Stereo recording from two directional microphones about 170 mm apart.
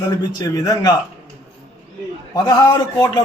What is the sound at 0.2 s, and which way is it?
Speech, 20° left (ahead or behind).